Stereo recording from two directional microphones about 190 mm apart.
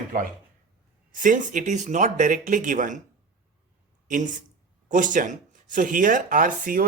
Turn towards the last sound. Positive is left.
turn(degrees=-45)  # may be behind; listen again after turning